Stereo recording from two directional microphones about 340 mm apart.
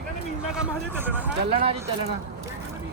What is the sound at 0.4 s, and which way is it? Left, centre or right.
Speech, centre.